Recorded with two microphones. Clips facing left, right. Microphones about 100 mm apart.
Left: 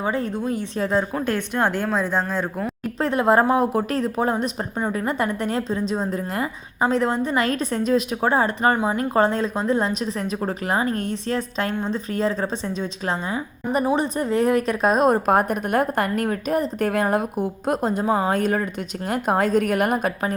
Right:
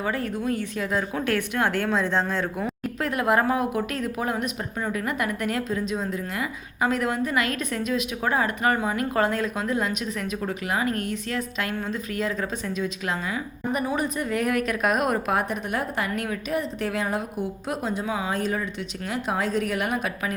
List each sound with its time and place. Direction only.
0.0 s a woman's voice: 25° left (ahead or behind)
1.3 s a woman's voice: 20° left (ahead or behind)
3.0 s a woman's voice: 30° left (ahead or behind)
6.8 s a woman's voice: 30° left (ahead or behind)
15.3 s a woman's voice: 45° left (ahead or behind)